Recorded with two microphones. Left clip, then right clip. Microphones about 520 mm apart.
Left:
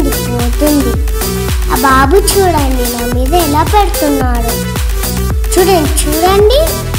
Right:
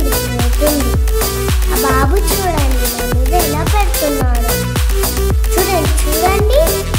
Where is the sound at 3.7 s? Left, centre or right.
Right.